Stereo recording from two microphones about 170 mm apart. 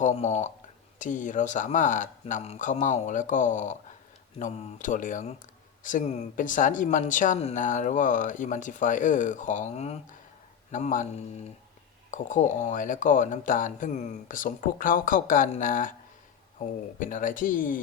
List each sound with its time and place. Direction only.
0.0 s speech: 40° left (ahead or behind)
17.0 s speech: 50° left (ahead or behind)